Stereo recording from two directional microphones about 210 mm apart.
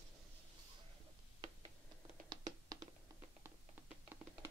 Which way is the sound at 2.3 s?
20° right (ahead or behind).